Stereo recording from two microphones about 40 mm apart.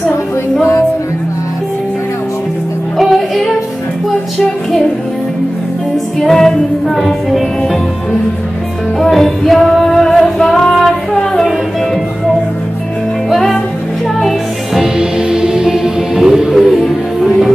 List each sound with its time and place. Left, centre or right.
3.0 s music: centre
6.1 s music: centre
9.1 s music: centre
14.2 s music: centre
15.0 s music: centre